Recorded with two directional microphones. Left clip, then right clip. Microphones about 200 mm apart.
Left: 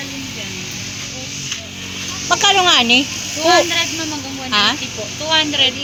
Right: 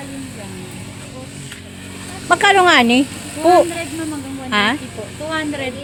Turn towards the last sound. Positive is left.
turn(degrees=-60)  # may be behind; listen again after turning